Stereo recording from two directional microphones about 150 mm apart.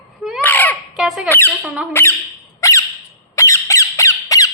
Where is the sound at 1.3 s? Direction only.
15° left (ahead or behind).